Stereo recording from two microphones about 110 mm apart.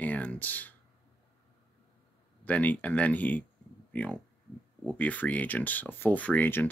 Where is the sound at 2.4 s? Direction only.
15° left (ahead or behind).